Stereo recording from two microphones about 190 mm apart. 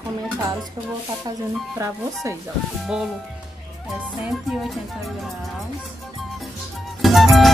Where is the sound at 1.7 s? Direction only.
15° right (ahead or behind).